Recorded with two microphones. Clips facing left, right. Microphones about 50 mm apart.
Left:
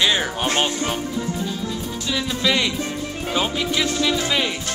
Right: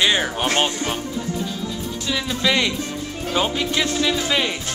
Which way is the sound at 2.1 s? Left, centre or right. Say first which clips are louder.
Even; centre.